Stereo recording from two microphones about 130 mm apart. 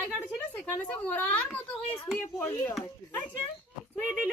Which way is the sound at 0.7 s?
15° left (ahead or behind).